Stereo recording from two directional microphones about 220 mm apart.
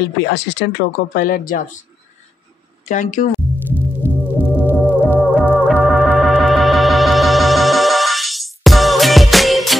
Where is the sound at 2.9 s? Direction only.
35° left (ahead or behind).